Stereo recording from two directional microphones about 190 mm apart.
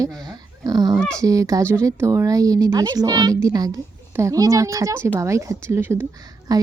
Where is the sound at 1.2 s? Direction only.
15° right (ahead or behind).